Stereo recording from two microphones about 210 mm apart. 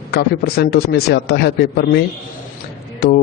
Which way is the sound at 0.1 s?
50° left (ahead or behind).